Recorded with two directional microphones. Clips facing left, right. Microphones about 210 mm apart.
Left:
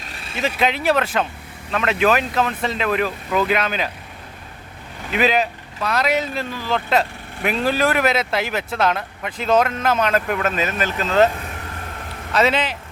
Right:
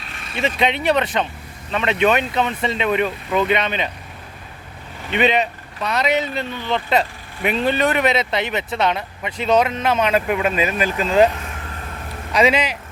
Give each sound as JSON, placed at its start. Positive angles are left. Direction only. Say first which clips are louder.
{"t": 0.0, "sound": "vehicle", "louder": "even", "side_deg": 35}
{"t": 0.3, "sound": "speech", "louder": "right 1 dB", "side_deg": 5}
{"t": 5.1, "sound": "speech", "louder": "right 1 dB", "side_deg": 0}